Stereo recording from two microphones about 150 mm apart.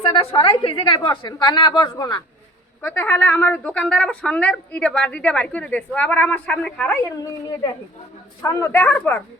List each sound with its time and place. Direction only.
0.0 s a woman's voice: 35° left (ahead or behind)
2.8 s a woman's voice: 15° left (ahead or behind)
7.2 s a woman's voice: 25° left (ahead or behind)